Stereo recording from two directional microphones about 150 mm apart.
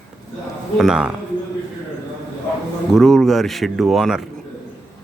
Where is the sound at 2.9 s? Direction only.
Centre (ahead or behind).